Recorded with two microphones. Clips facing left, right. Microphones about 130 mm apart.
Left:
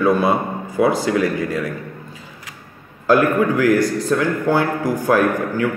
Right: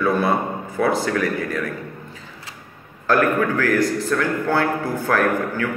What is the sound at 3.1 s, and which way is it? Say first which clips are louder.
A man's voice: left 3 dB; 15° left (ahead or behind).